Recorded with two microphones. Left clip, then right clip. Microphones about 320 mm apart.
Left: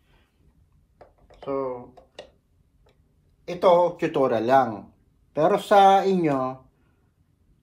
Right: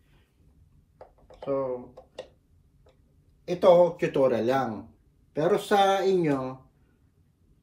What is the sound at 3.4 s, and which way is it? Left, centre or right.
Speech, centre.